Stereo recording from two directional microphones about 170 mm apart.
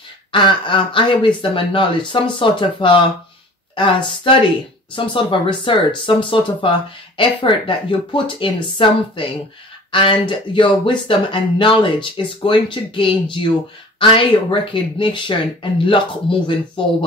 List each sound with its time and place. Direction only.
0.3 s speech: 30° left (ahead or behind)